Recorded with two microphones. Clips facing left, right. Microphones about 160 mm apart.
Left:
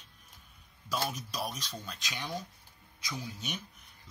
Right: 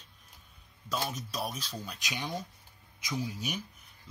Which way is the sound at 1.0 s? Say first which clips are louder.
Even; centre (ahead or behind).